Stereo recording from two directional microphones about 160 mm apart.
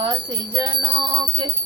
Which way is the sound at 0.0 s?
25° right (ahead or behind).